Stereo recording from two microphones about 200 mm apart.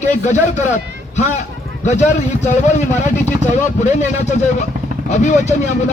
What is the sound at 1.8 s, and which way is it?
A man's voice, 35° left (ahead or behind).